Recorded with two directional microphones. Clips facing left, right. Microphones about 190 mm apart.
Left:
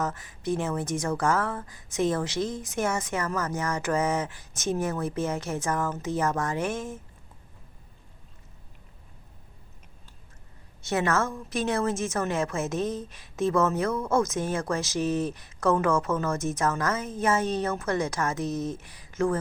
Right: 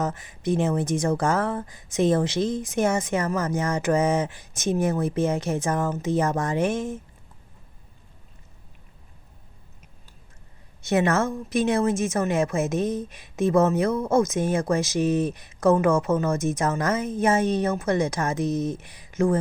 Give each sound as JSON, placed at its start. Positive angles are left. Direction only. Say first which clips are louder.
{"t": 0.0, "sound": "speech", "louder": "right 3 dB", "side_deg": -20}
{"t": 10.8, "sound": "speech", "louder": "right 4 dB", "side_deg": -15}